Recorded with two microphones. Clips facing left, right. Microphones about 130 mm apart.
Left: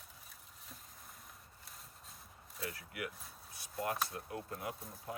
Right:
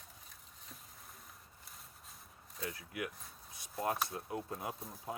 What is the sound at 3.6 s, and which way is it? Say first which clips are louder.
Chop: right 2 dB; 30° right (ahead or behind).